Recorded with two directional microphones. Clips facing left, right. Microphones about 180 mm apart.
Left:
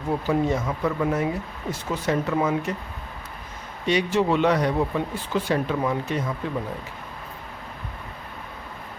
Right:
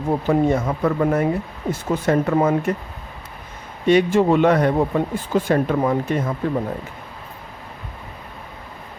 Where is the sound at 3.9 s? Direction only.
50° right (ahead or behind).